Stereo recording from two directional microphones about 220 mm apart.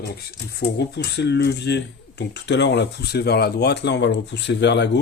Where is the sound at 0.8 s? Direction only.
50° left (ahead or behind).